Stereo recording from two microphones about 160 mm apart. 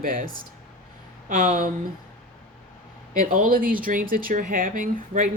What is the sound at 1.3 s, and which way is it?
Speech, 55° right (ahead or behind).